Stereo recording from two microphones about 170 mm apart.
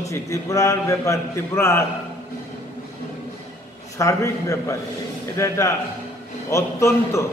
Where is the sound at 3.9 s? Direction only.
20° left (ahead or behind).